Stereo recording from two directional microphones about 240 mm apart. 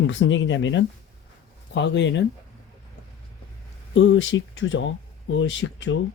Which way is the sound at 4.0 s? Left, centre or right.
Left.